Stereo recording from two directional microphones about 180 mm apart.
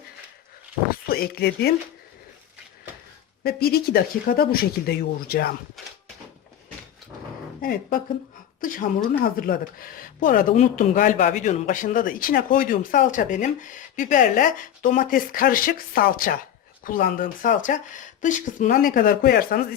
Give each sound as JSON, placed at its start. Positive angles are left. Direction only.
{"t": 0.9, "sound": "speech", "side_deg": 55}
{"t": 3.4, "sound": "speech", "side_deg": 60}
{"t": 5.8, "sound": "a sound", "side_deg": 0}
{"t": 7.6, "sound": "a woman's voice", "side_deg": 55}